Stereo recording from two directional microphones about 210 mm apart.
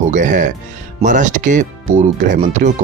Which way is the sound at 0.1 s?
35° right (ahead or behind).